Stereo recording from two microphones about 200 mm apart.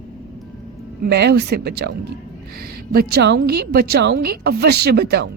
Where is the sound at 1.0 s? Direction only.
60° right (ahead or behind).